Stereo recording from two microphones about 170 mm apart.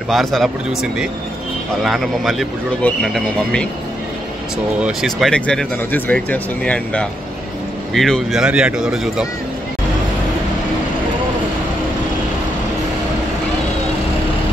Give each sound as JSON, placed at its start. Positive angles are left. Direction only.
{"t": 0.1, "sound": "speech", "side_deg": 0}
{"t": 1.8, "sound": "speech", "side_deg": 0}
{"t": 4.8, "sound": "speech", "side_deg": 0}